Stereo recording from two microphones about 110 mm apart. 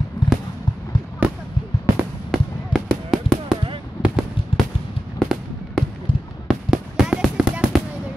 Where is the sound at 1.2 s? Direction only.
10° right (ahead or behind).